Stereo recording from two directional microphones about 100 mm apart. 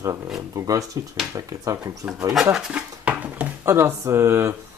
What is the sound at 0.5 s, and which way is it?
Speech, 35° right (ahead or behind).